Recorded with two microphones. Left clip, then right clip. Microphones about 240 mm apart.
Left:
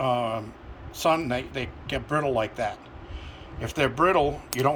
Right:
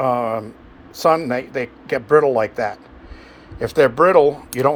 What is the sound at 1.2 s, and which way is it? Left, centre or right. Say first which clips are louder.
Speech: right 7 dB; right.